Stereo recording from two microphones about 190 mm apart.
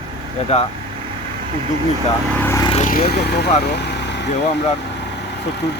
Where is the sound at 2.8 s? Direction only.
50° left (ahead or behind).